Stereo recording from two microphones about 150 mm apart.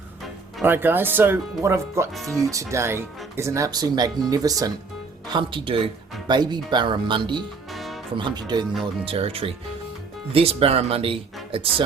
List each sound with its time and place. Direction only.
0.6 s speech: 15° right (ahead or behind); by 7.4 s 30° right (ahead or behind)
7.7 s music: centre (ahead or behind)
8.1 s speech: 30° right (ahead or behind)
9.0 s speech: 40° right (ahead or behind)